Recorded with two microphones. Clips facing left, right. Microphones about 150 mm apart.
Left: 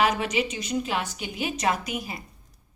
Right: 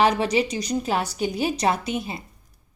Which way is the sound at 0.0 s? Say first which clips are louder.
Right 4 dB; 30° right (ahead or behind).